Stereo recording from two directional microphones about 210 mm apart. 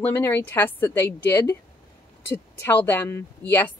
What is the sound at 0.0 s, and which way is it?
A woman's voice, 10° left (ahead or behind).